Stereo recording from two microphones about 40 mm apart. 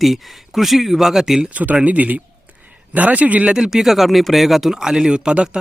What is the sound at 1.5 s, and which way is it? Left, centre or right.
Speech, right.